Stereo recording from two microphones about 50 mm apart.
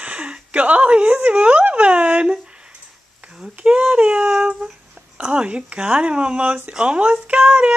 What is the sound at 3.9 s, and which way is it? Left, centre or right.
Speech, right.